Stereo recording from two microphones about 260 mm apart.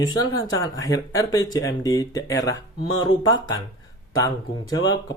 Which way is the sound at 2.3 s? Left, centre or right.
Left.